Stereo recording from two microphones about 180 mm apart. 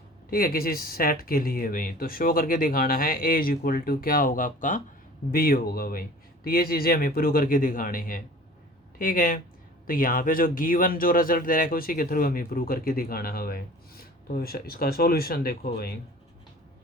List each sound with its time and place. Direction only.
0.3 s speech: 55° left (ahead or behind)